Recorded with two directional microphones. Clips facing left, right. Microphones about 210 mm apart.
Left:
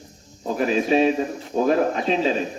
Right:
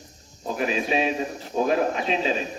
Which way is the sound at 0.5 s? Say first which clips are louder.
Left 5 dB; 40° left (ahead or behind).